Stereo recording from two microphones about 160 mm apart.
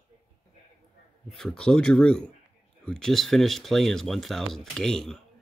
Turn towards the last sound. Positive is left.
turn(degrees=5)  # may be behind; listen again after turning